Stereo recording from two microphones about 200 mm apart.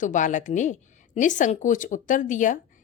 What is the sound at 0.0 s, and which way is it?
A woman's voice, 40° left (ahead or behind).